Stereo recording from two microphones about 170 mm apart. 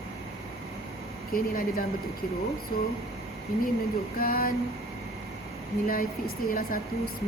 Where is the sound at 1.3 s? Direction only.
60° left (ahead or behind).